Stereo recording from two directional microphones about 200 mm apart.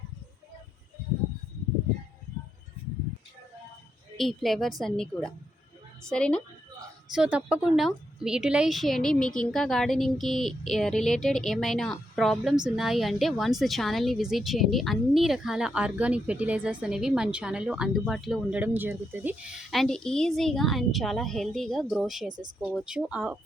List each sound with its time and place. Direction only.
4.2 s a woman's voice: centre (ahead or behind)